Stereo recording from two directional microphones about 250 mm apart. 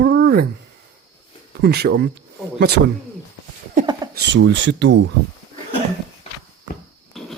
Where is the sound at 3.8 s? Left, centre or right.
Right.